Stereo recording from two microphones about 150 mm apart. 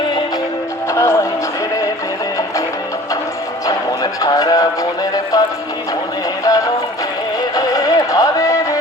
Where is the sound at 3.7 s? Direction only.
25° left (ahead or behind).